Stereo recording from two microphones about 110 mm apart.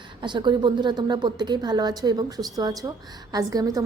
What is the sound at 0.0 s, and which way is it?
A woman's voice, 45° right (ahead or behind).